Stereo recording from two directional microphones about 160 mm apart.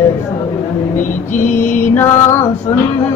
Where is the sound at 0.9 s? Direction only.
55° left (ahead or behind).